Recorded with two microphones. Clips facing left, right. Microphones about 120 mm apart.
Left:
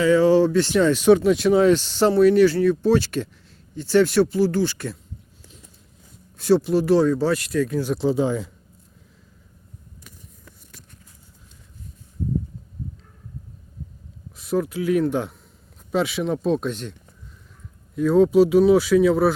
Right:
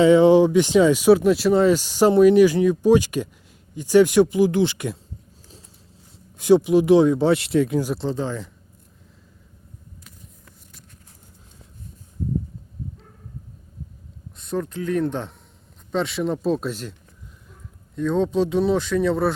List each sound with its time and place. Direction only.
0.0 s speech: 20° right (ahead or behind)
6.3 s speech: 15° right (ahead or behind)
7.9 s speech: 10° left (ahead or behind)
14.3 s speech: 5° left (ahead or behind)
17.9 s speech: 5° left (ahead or behind)